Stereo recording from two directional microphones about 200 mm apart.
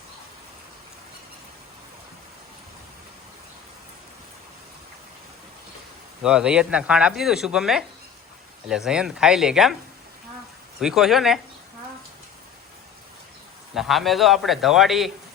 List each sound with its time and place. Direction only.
6.2 s speech: 5° right (ahead or behind)
10.8 s speech: centre (ahead or behind)
13.7 s speech: centre (ahead or behind)